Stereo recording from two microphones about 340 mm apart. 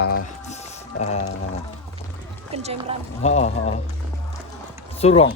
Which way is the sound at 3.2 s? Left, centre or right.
Centre.